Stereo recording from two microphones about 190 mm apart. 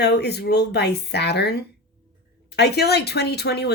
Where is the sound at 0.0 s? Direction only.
60° left (ahead or behind).